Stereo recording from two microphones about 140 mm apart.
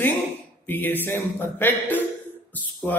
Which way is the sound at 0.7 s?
15° left (ahead or behind).